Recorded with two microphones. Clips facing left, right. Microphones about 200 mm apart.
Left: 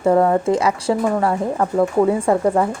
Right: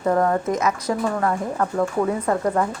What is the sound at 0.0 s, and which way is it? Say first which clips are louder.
A woman's voice: left 5 dB; 20° left (ahead or behind).